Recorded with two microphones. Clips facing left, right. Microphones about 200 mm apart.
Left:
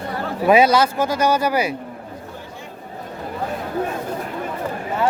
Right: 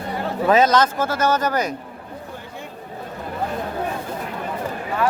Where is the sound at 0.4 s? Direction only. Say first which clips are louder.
Left 2 dB; 10° left (ahead or behind).